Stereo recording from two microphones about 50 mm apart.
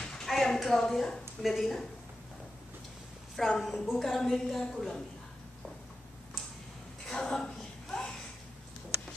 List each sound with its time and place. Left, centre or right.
0.0 s a sound: centre
0.3 s a woman's voice: centre
1.4 s a woman's voice: centre
3.3 s a woman's voice: centre
3.9 s a woman's voice: centre
7.1 s a sound: centre